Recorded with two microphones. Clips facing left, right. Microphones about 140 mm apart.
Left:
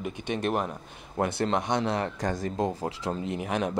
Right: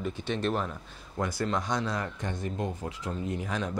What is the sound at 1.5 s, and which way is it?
Speech, 25° left (ahead or behind).